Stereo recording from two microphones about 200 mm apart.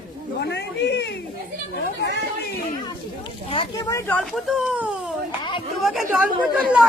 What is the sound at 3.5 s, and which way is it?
Speech, 25° left (ahead or behind).